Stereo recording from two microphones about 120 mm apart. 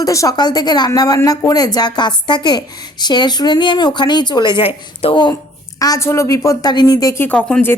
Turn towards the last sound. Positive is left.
turn(degrees=10)  # may be behind; listen again after turning